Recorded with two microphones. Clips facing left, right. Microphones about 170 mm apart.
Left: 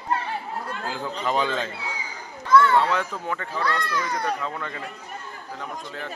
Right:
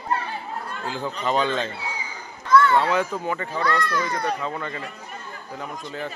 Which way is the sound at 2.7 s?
5° right (ahead or behind).